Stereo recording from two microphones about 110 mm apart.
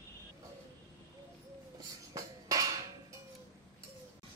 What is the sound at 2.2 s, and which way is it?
Music, 30° right (ahead or behind).